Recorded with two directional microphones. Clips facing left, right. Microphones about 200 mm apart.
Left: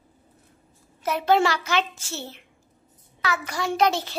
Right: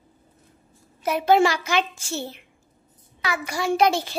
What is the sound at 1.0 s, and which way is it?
A child's voice, 10° right (ahead or behind).